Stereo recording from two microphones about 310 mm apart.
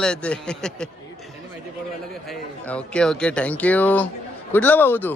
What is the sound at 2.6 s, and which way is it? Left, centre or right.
A man's voice, centre.